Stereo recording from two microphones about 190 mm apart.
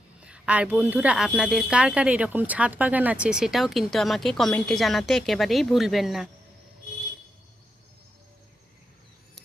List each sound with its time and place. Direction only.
0.3 s speech: 5° right (ahead or behind)